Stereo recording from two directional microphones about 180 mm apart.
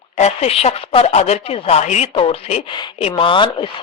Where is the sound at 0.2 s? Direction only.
40° left (ahead or behind).